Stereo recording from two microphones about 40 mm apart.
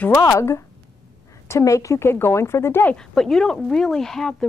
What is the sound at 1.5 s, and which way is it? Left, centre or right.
A woman's voice, left.